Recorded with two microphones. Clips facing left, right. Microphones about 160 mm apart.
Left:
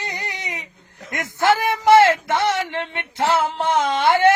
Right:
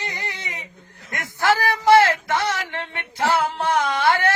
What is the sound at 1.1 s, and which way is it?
Speech, 20° left (ahead or behind).